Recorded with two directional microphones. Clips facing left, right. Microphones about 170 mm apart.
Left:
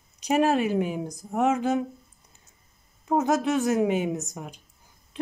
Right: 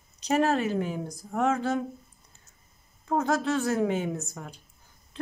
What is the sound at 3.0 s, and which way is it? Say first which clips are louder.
Speech: left 3 dB; 15° left (ahead or behind).